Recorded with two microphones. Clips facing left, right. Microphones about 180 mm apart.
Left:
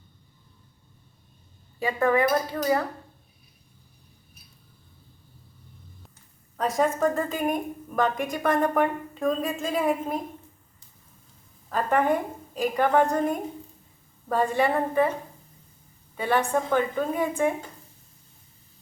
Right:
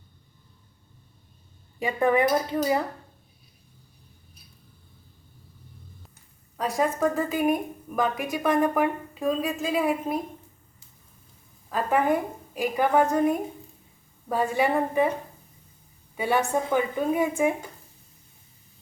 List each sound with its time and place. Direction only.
1.8 s a woman's voice: 15° right (ahead or behind)
6.6 s a woman's voice: centre (ahead or behind)
11.7 s a woman's voice: 5° right (ahead or behind)
16.1 s a woman's voice: 10° right (ahead or behind)